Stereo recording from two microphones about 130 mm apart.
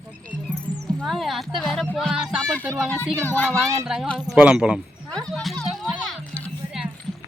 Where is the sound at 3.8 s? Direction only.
5° right (ahead or behind).